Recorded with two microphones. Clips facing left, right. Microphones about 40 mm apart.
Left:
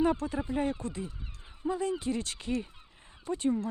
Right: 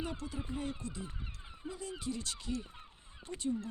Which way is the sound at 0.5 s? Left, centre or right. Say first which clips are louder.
Left 8 dB; left.